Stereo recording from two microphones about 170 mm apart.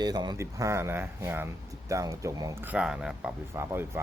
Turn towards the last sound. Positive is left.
turn(degrees=-15)  # may be behind; listen again after turning